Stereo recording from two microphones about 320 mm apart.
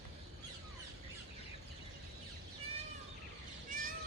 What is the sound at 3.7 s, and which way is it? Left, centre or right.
Cat, right.